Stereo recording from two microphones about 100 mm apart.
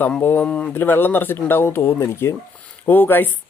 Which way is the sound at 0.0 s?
20° left (ahead or behind).